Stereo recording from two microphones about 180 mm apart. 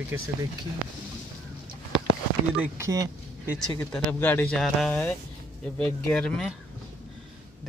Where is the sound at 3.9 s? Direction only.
10° left (ahead or behind).